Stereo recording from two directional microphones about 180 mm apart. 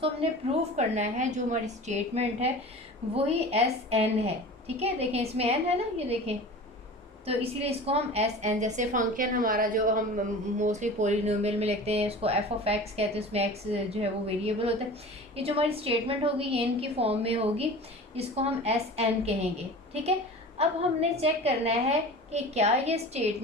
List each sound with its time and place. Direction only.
0.8 s a woman's voice: 40° right (ahead or behind)